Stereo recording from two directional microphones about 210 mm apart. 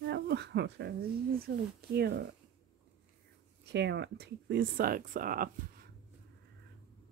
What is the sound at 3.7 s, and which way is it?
Speech, 55° right (ahead or behind).